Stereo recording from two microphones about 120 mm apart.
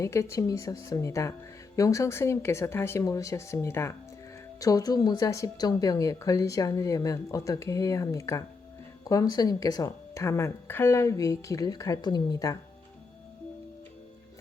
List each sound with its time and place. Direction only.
0.0 s a woman's voice: 25° left (ahead or behind)